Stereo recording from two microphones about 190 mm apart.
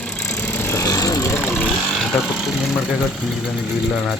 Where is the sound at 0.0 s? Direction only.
5° left (ahead or behind).